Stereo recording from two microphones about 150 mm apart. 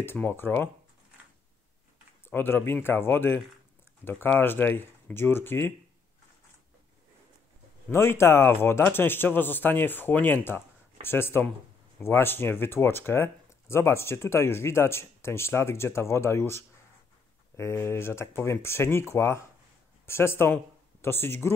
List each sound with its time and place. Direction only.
0.0 s speech: 15° left (ahead or behind)
2.2 s speech: 15° left (ahead or behind)
7.9 s speech: 15° left (ahead or behind)